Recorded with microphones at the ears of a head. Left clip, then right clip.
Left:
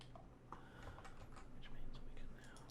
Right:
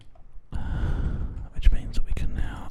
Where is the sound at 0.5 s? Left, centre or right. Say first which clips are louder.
Right 18 dB; right.